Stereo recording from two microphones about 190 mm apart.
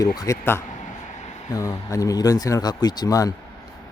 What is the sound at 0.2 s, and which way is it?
Speech, 15° left (ahead or behind).